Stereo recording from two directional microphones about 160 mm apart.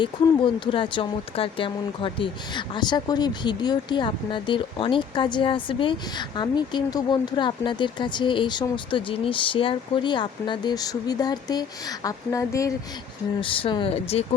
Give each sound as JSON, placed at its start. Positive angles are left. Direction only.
{"t": 0.0, "sound": "speech", "side_deg": 30}
{"t": 13.4, "sound": "speech", "side_deg": 35}